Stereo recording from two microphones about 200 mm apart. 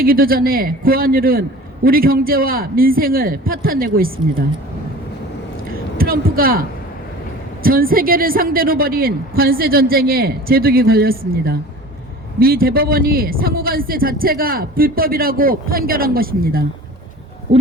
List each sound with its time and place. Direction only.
0.0 s a man's voice: 45° right (ahead or behind)
5.6 s a sound: 45° right (ahead or behind)
7.6 s a man's voice: 45° right (ahead or behind)